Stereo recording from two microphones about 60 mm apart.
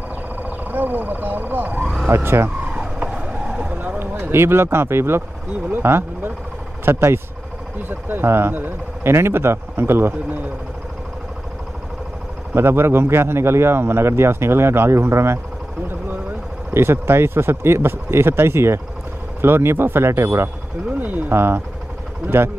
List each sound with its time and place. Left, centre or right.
0.4 s speech: right
2.0 s speech: right
2.7 s vehicle: centre
3.7 s speech: right
4.3 s speech: right
12.5 s speech: right
16.7 s speech: right
21.0 s speech: right